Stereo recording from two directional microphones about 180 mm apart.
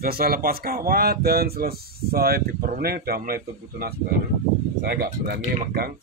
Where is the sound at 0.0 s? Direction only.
55° right (ahead or behind).